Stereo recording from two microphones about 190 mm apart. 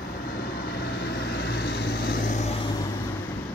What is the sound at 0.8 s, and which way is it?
Vehicle, 60° left (ahead or behind).